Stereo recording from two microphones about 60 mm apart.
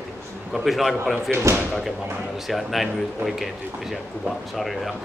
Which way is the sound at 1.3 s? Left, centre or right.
Right.